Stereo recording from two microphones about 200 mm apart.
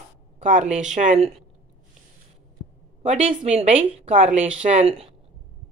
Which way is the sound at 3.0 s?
30° right (ahead or behind).